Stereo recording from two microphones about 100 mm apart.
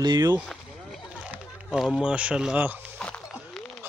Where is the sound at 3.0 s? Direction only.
10° left (ahead or behind).